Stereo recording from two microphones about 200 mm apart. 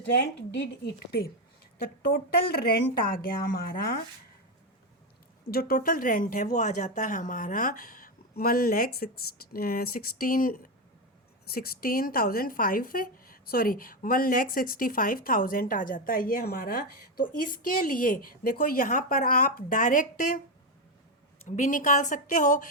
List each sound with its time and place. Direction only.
0.0 s a woman's voice: 55° left (ahead or behind)
5.5 s speech: 50° left (ahead or behind)
21.4 s speech: 40° left (ahead or behind)